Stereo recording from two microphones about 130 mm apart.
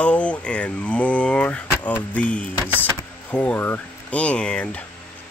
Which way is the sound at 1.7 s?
15° left (ahead or behind).